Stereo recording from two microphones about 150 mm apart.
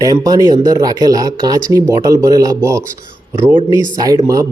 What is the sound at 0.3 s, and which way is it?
Speech, 25° right (ahead or behind).